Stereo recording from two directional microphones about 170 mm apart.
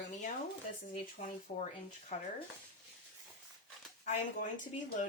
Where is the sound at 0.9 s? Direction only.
50° left (ahead or behind).